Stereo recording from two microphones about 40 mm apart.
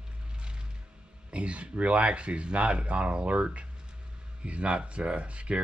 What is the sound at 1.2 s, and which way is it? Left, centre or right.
Speech, right.